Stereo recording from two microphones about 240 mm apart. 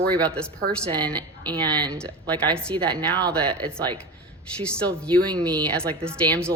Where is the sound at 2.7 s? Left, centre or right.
Centre.